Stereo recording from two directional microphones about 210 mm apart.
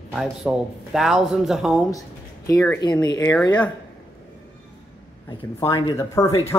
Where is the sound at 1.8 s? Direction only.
15° left (ahead or behind).